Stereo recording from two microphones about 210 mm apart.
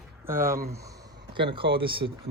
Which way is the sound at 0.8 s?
20° right (ahead or behind).